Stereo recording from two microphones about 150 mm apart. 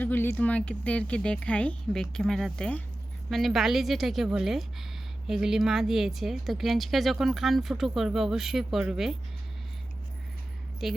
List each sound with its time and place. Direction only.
0.0 s speech: 15° left (ahead or behind); by 9.1 s 5° right (ahead or behind)
10.8 s speech: centre (ahead or behind)